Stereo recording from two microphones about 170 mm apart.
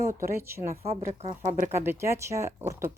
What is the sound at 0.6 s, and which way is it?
Speech, 35° right (ahead or behind).